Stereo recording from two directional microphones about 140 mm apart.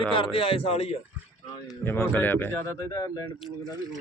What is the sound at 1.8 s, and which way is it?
A man's voice, 15° left (ahead or behind).